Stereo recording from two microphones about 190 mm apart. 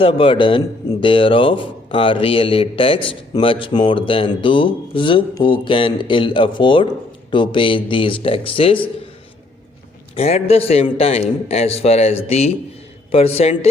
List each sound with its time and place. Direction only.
0.0 s speech: 25° left (ahead or behind)
10.2 s a man's voice: 30° left (ahead or behind)